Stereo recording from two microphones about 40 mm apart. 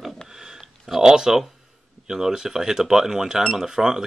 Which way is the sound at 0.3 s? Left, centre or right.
Centre.